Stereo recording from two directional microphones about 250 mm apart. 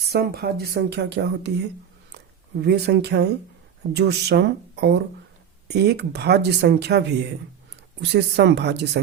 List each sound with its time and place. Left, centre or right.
0.1 s speech: right